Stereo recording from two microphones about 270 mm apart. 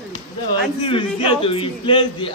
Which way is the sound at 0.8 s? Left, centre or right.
Centre.